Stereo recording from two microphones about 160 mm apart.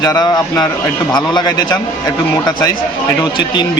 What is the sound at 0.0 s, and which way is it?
Speech, 25° left (ahead or behind).